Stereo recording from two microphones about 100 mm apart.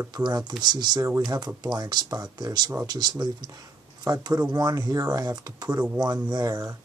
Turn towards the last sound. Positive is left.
turn(degrees=-35)  # may be behind; listen again after turning